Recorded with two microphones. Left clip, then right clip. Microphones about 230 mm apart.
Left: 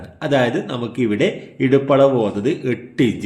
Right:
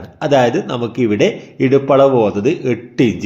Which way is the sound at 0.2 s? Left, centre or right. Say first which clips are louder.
Right 5 dB; centre.